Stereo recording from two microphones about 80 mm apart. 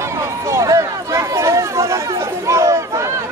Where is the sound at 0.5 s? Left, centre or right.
Right.